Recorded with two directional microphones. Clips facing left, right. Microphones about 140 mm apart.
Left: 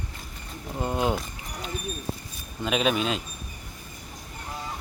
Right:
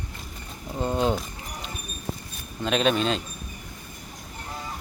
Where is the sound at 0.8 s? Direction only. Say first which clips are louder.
Right 2 dB; 10° left (ahead or behind).